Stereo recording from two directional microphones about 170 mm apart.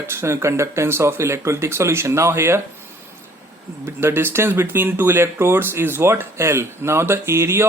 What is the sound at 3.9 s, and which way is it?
Speech, 15° right (ahead or behind).